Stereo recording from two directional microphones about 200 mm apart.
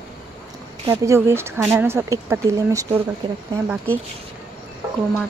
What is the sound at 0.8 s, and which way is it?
Speech, 15° right (ahead or behind).